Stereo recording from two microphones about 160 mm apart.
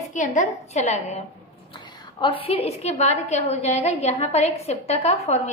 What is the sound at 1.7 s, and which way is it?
A woman's voice, 30° left (ahead or behind).